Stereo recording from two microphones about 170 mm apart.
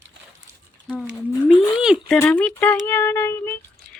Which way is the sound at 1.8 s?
Centre (ahead or behind).